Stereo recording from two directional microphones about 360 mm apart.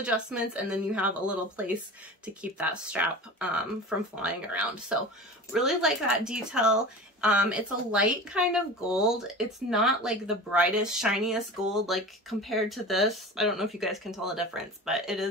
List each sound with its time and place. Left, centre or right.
0.0 s speech: centre